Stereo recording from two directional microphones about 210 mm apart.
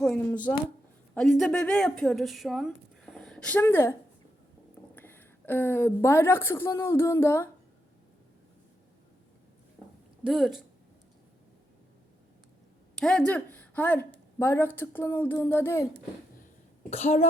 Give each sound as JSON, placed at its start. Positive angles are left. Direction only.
{"t": 0.0, "sound": "speech", "side_deg": 5}
{"t": 4.9, "sound": "a woman's voice", "side_deg": 10}
{"t": 9.8, "sound": "a sound", "side_deg": 15}
{"t": 10.2, "sound": "speech", "side_deg": 0}
{"t": 13.0, "sound": "speech", "side_deg": 5}
{"t": 16.9, "sound": "speech", "side_deg": 30}